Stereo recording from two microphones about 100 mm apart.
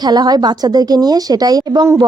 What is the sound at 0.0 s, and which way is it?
Speech, 45° right (ahead or behind).